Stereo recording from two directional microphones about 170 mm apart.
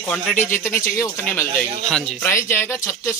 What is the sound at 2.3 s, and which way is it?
Speech, 15° left (ahead or behind).